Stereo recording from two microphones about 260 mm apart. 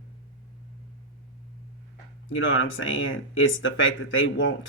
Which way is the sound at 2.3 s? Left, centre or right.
Left.